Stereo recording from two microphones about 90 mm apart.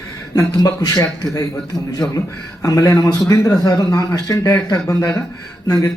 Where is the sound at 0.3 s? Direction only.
40° left (ahead or behind).